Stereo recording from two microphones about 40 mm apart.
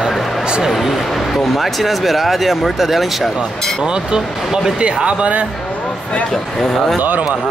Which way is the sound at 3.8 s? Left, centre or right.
Centre.